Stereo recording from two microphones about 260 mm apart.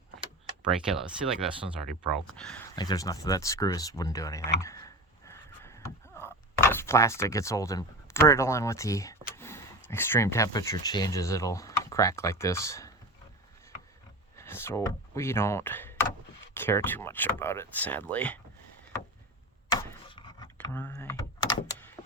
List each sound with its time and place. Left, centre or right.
1.3 s speech: centre
4.6 s a sound: centre
9.3 s speech: centre
14.3 s speech: centre
19.7 s a sound: centre
20.7 s power windows: centre